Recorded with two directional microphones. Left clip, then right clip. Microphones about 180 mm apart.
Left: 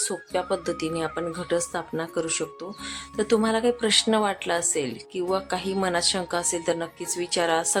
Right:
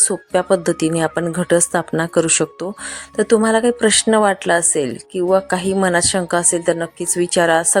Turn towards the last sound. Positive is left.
turn(degrees=-35)  # may be behind; listen again after turning